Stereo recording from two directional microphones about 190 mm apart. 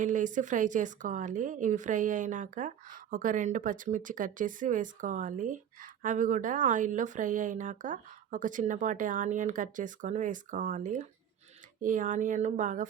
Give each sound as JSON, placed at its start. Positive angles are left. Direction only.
{"t": 0.0, "sound": "speech", "side_deg": -40}